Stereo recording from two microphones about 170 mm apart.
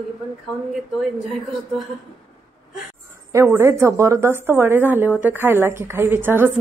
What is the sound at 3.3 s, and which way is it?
A woman's voice, 15° right (ahead or behind).